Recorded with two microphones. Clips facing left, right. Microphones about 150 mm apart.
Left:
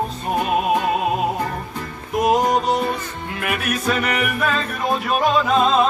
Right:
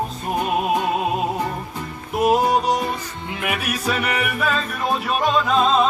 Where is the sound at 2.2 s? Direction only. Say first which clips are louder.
Even; 10° right (ahead or behind).